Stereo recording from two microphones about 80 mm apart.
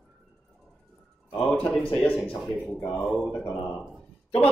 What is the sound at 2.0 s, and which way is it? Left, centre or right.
A man's voice, centre.